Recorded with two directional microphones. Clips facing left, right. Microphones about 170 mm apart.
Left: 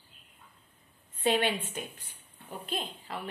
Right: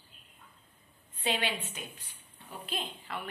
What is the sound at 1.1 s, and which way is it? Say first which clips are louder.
A woman's voice: left 5 dB; 50° left (ahead or behind).